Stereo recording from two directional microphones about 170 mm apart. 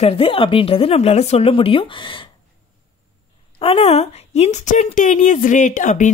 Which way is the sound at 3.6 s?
35° left (ahead or behind).